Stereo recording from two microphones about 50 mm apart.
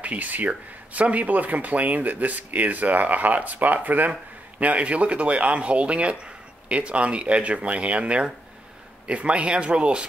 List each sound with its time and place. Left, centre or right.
0.0 s speech: right